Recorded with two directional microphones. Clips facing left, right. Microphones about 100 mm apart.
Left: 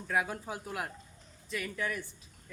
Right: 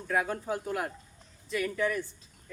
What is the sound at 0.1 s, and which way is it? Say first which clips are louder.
Speech: right 3 dB; 5° left (ahead or behind).